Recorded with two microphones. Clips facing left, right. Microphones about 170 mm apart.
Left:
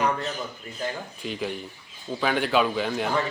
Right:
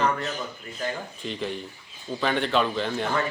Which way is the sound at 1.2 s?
5° left (ahead or behind).